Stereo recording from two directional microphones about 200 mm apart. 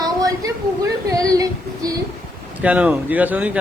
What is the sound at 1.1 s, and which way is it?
Female singing, 15° right (ahead or behind).